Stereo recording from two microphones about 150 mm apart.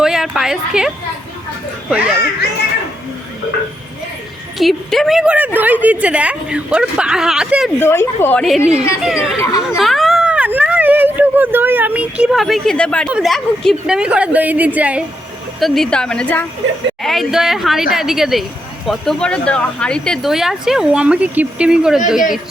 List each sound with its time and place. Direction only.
0.0 s a sound: 5° right (ahead or behind)
1.9 s a woman's voice: 5° right (ahead or behind)
4.5 s a woman's voice: centre (ahead or behind)
7.8 s speech: 15° left (ahead or behind)
8.4 s speech: centre (ahead or behind)
9.6 s a sound: centre (ahead or behind)
13.1 s a woman's voice: 5° right (ahead or behind)
15.6 s speech: centre (ahead or behind)
17.0 s speech: centre (ahead or behind)